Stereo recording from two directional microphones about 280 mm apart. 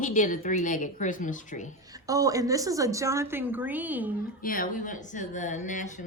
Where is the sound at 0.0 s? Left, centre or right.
Left.